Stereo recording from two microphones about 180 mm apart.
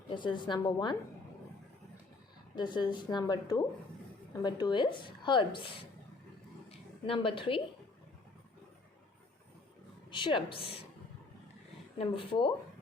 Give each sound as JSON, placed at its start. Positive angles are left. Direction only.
{"t": 0.1, "sound": "a woman's voice", "side_deg": 25}
{"t": 2.6, "sound": "a woman's voice", "side_deg": 25}
{"t": 6.7, "sound": "a sound", "side_deg": 30}
{"t": 10.1, "sound": "a woman's voice", "side_deg": 25}
{"t": 11.9, "sound": "a woman's voice", "side_deg": 30}